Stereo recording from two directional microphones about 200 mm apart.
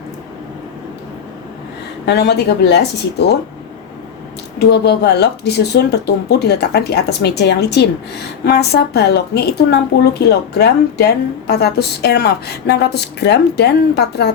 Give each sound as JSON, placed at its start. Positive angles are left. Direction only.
{"t": 2.0, "sound": "a woman's voice", "side_deg": 55}
{"t": 4.6, "sound": "a woman's voice", "side_deg": 55}